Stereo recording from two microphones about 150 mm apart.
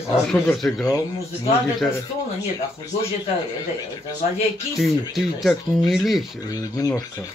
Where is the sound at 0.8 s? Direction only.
20° left (ahead or behind).